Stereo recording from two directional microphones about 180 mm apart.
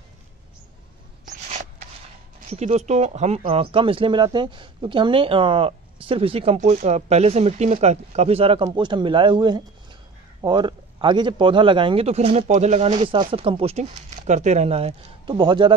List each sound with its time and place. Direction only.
2.5 s a man's voice: 35° right (ahead or behind)
12.9 s speech: 30° right (ahead or behind)